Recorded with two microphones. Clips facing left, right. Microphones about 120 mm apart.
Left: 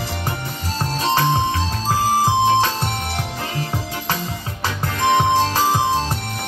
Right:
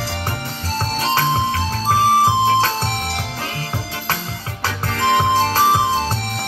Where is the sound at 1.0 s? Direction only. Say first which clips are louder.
Left 1 dB; 20° left (ahead or behind).